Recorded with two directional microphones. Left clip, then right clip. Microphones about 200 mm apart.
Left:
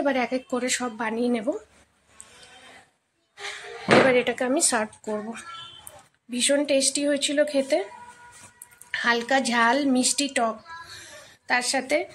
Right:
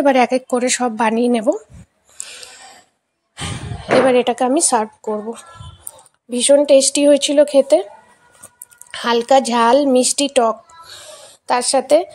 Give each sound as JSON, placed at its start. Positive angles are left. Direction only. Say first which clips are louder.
{"t": 0.0, "sound": "speech", "louder": "right 11 dB", "side_deg": -40}
{"t": 4.1, "sound": "speech", "louder": "right 8 dB", "side_deg": -30}
{"t": 6.3, "sound": "speech", "louder": "right 11 dB", "side_deg": -25}
{"t": 8.9, "sound": "speech", "louder": "right 9 dB", "side_deg": -30}